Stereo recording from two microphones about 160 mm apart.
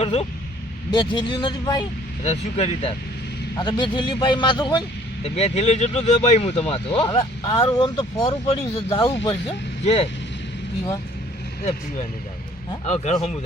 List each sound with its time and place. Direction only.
0.0 s a man's voice: 40° left (ahead or behind)
2.2 s a man's voice: 40° left (ahead or behind)
3.6 s a man's voice: 30° left (ahead or behind)
8.4 s a man's voice: 35° left (ahead or behind)
12.8 s speech: 45° left (ahead or behind)